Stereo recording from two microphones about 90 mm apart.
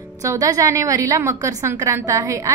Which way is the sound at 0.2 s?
40° right (ahead or behind).